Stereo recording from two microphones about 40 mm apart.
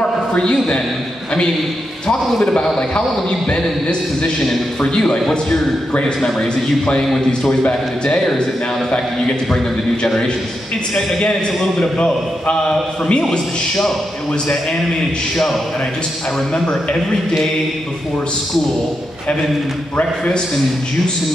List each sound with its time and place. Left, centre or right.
0.4 s a man's voice: left
2.4 s a man's voice: centre
4.9 s a man's voice: centre
7.2 s a man's voice: left
16.5 s a man's voice: centre